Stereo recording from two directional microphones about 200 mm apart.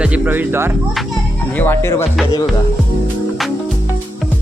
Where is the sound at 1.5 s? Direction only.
10° left (ahead or behind).